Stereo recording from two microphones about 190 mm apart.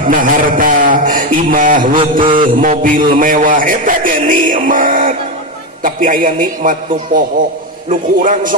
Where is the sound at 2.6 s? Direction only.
45° right (ahead or behind).